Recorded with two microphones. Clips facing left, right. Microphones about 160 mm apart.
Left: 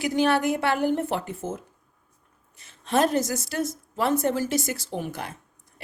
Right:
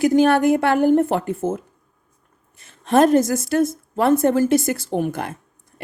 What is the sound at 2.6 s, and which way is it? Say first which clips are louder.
A woman's voice: right 7 dB; 50° right (ahead or behind).